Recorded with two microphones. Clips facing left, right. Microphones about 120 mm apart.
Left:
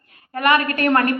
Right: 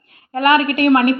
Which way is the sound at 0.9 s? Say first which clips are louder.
Right 5 dB; 15° right (ahead or behind).